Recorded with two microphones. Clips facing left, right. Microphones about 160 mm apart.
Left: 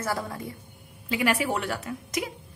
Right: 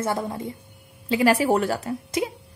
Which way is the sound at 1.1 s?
35° right (ahead or behind).